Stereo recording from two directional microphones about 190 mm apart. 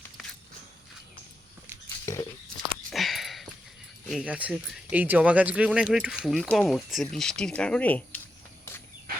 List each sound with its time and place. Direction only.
2.1 s a sound: 15° left (ahead or behind)
2.6 s sniff: centre (ahead or behind)
4.1 s speech: 5° right (ahead or behind)